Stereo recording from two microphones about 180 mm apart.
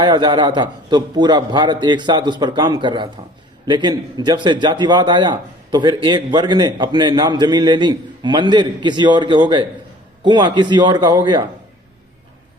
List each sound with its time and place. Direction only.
0.0 s a man's voice: 25° right (ahead or behind)